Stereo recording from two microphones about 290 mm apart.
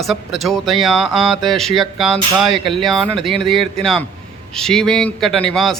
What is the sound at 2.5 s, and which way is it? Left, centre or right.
Speech, centre.